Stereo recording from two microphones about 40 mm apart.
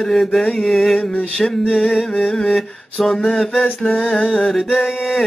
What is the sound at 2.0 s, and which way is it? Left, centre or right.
Mantra, centre.